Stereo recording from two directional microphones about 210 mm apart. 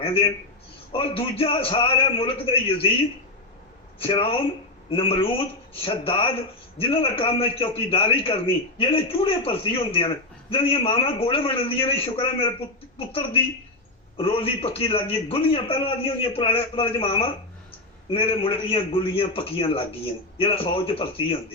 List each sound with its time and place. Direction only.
0.0 s a man's voice: 25° left (ahead or behind)
3.9 s a man's voice: 25° left (ahead or behind)